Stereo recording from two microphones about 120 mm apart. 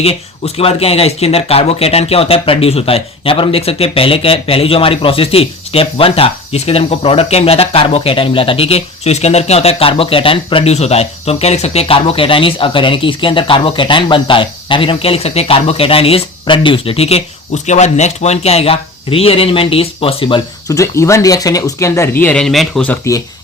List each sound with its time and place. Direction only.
0.0 s speech: 55° left (ahead or behind)
20.7 s speech: 25° left (ahead or behind); by 23.0 s 5° left (ahead or behind)